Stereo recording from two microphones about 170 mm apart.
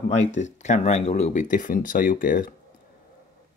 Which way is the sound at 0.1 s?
40° left (ahead or behind).